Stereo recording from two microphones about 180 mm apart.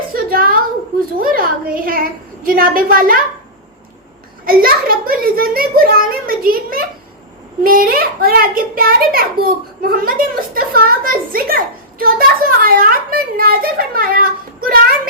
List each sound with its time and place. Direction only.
0.1 s a sound: 55° right (ahead or behind)
1.2 s a woman's voice: 55° right (ahead or behind)
4.4 s a child's voice: 55° right (ahead or behind)